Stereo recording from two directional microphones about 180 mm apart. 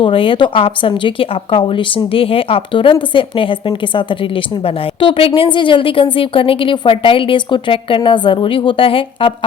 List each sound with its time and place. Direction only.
0.0 s speech: 30° left (ahead or behind)